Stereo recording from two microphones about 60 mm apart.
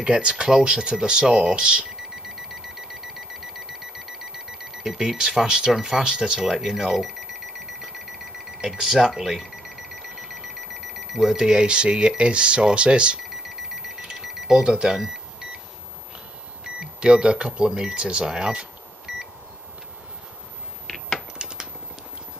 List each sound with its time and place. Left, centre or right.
0.0 s speech: centre
2.2 s alarm: centre
8.5 s alarm clock: centre
12.2 s speech: centre
13.4 s alarm: centre
14.0 s alarm clock: centre
16.6 s speech: centre
20.8 s a sound: centre
21.4 s a sound: centre